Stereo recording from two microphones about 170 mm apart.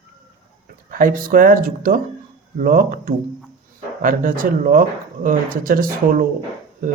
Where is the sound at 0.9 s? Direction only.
55° right (ahead or behind).